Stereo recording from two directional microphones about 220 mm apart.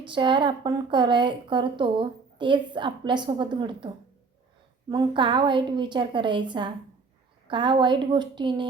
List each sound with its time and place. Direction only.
0.1 s a woman's voice: 20° right (ahead or behind)